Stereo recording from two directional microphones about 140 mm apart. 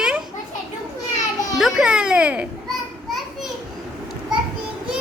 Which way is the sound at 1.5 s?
Centre (ahead or behind).